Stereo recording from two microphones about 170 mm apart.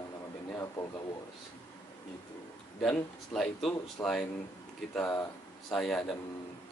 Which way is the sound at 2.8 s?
5° left (ahead or behind).